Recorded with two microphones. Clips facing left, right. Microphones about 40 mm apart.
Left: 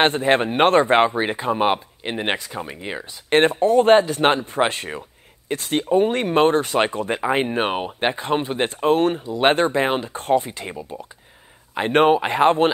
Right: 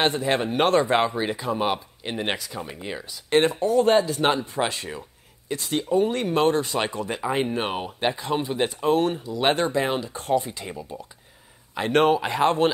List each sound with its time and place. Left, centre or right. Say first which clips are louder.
0.0 s speech: left 5 dB; left
3.3 s speech: left 4 dB; left